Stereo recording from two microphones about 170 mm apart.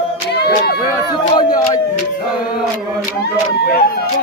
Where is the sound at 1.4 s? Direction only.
25° left (ahead or behind).